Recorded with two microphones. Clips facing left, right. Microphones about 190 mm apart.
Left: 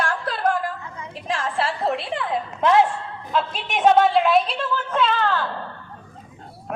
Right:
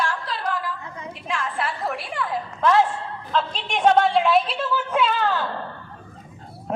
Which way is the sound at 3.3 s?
5° left (ahead or behind).